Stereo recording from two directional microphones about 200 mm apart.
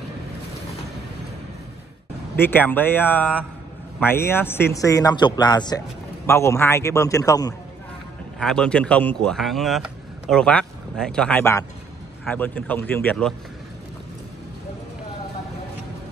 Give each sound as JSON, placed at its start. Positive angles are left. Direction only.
{"t": 2.3, "sound": "a man's voice", "side_deg": 10}
{"t": 8.4, "sound": "a man's voice", "side_deg": 5}